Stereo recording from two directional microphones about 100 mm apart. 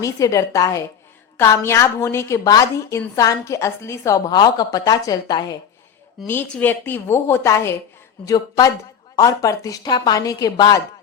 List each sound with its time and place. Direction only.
0.0 s a woman's voice: 35° left (ahead or behind)
6.2 s a woman's voice: 20° left (ahead or behind); by 10.8 s 40° left (ahead or behind)